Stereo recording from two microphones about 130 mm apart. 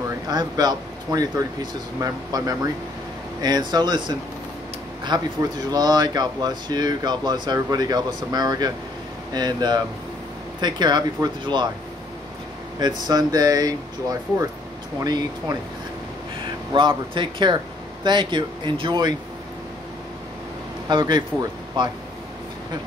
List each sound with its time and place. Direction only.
0.3 s speech: 30° right (ahead or behind)
13.0 s speech: 30° right (ahead or behind)
20.9 s speech: 35° right (ahead or behind)